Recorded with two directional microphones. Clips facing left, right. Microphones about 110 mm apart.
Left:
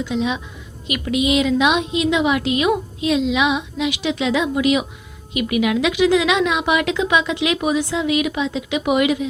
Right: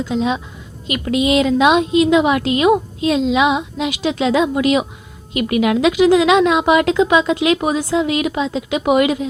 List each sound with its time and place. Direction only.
0.0 s a woman's voice: 35° right (ahead or behind)